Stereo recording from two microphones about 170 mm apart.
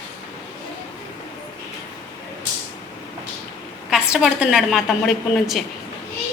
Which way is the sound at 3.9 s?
5° right (ahead or behind).